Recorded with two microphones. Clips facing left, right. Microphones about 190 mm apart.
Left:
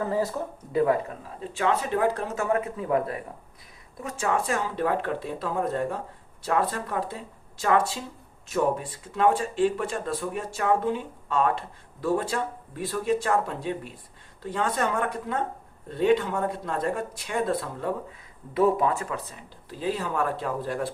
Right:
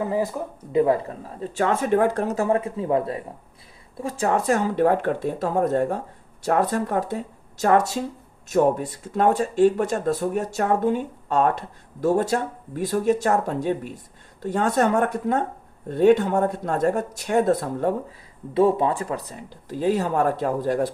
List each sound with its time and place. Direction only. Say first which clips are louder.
0.0 s speech: right 2 dB; 15° right (ahead or behind)
1.4 s speech: right 3 dB; 45° right (ahead or behind)
2.3 s speech: right 4 dB; 30° right (ahead or behind)
18.5 s speech: right 3 dB; 30° right (ahead or behind)